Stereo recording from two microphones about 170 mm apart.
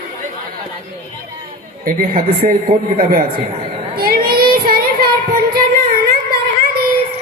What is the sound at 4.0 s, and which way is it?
Child singing, 60° right (ahead or behind).